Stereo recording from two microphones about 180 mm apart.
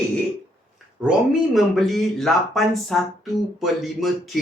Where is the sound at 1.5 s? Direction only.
Centre (ahead or behind).